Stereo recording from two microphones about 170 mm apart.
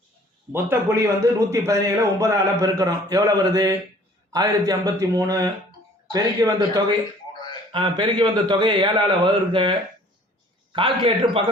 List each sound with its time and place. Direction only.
0.5 s a man's voice: 15° right (ahead or behind); by 11.4 s 30° right (ahead or behind)